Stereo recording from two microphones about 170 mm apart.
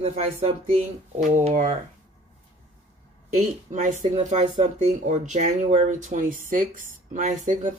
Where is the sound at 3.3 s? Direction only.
45° right (ahead or behind).